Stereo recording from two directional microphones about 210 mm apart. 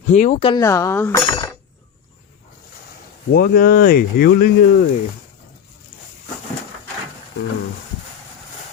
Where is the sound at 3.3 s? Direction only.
45° left (ahead or behind).